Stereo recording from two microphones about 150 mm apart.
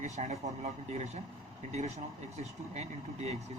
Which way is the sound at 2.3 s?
45° right (ahead or behind).